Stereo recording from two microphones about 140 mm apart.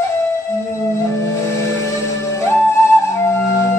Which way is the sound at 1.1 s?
20° left (ahead or behind).